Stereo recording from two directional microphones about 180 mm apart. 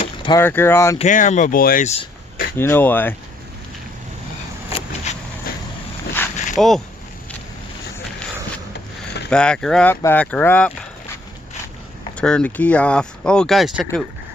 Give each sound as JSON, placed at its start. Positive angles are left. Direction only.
{"t": 0.0, "sound": "vehicle", "side_deg": 25}
{"t": 0.3, "sound": "speech", "side_deg": 10}
{"t": 0.9, "sound": "speech", "side_deg": 45}
{"t": 2.6, "sound": "speech", "side_deg": 10}
{"t": 5.1, "sound": "a sound", "side_deg": 40}
{"t": 5.5, "sound": "vehicle", "side_deg": 55}
{"t": 6.2, "sound": "a sound", "side_deg": 10}
{"t": 6.6, "sound": "speech", "side_deg": 0}
{"t": 9.3, "sound": "speech", "side_deg": 5}
{"t": 12.1, "sound": "speech", "side_deg": 5}